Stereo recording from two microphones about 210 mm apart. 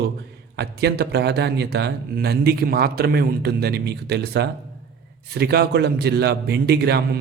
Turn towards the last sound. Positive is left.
turn(degrees=-50)  # may be behind; listen again after turning